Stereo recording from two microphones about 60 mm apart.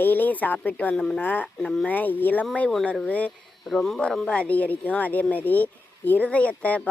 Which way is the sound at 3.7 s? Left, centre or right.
Centre.